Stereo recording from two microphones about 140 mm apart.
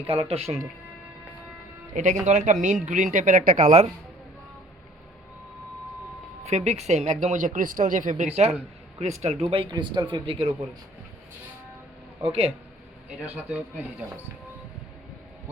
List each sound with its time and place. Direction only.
0.1 s speech: 40° right (ahead or behind)
1.9 s speech: 60° right (ahead or behind)
6.4 s speech: 50° right (ahead or behind); by 8.3 s 70° right (ahead or behind)
9.0 s speech: 50° right (ahead or behind)
12.2 s speech: 45° right (ahead or behind)